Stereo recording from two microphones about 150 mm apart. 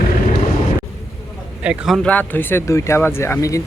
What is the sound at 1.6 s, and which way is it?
Speech, 5° right (ahead or behind).